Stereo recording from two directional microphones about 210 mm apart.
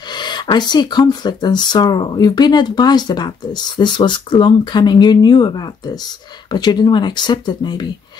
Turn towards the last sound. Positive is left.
turn(degrees=20)  # may be behind; listen again after turning